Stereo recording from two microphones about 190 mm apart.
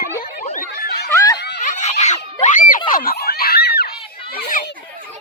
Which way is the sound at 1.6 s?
40° left (ahead or behind).